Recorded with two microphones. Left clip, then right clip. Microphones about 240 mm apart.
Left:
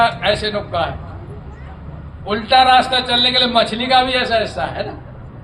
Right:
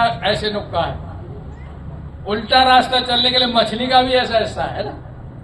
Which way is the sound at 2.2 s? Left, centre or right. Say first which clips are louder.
Left 2 dB; left.